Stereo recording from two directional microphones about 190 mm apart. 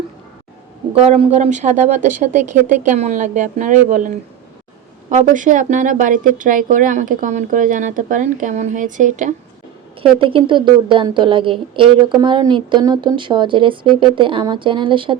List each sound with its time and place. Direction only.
0.9 s a woman's voice: 35° right (ahead or behind)
10.0 s a woman's voice: 25° right (ahead or behind)